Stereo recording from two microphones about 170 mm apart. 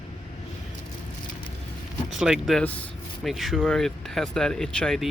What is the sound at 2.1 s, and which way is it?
Speech, 5° right (ahead or behind).